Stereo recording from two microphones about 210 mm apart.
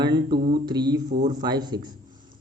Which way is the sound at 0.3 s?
45° right (ahead or behind).